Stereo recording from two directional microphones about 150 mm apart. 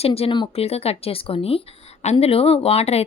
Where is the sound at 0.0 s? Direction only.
40° left (ahead or behind).